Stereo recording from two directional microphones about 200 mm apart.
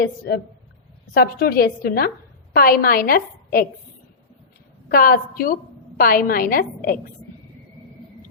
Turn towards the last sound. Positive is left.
turn(degrees=45)  # may be behind; listen again after turning